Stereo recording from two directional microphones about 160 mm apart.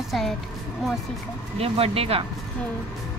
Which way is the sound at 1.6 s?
40° right (ahead or behind).